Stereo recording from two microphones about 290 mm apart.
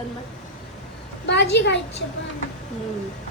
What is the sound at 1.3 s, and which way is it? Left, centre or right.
Speech, left.